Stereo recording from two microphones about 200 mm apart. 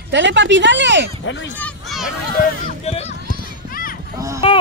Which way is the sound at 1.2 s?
65° left (ahead or behind).